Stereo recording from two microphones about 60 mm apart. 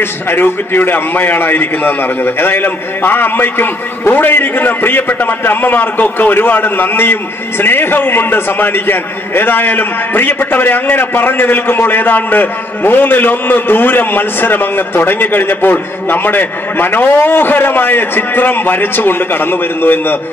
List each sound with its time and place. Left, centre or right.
0.0 s a man's voice: left